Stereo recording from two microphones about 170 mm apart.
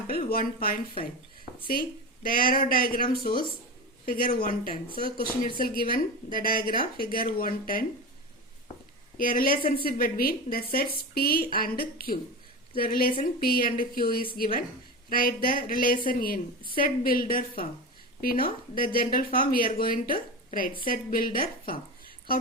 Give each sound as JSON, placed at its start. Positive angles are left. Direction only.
{"t": 0.1, "sound": "a woman's voice", "side_deg": 60}
{"t": 2.2, "sound": "a woman's voice", "side_deg": 55}
{"t": 9.1, "sound": "a woman's voice", "side_deg": 55}